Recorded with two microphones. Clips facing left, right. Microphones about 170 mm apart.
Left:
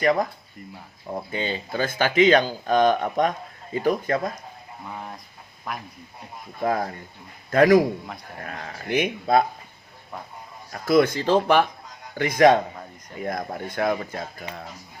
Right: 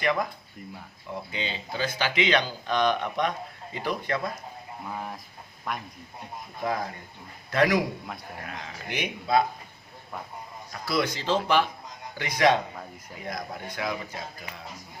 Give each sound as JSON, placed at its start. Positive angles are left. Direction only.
{"t": 0.0, "sound": "speech", "side_deg": 45}
{"t": 4.9, "sound": "speech", "side_deg": 0}
{"t": 6.6, "sound": "speech", "side_deg": 50}
{"t": 10.7, "sound": "speech", "side_deg": 50}